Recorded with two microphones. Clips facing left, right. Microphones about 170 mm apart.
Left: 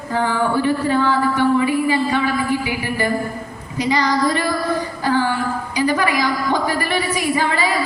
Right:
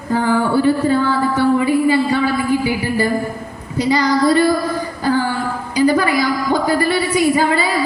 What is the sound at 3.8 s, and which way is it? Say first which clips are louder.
Speech: right 3 dB; 35° right (ahead or behind).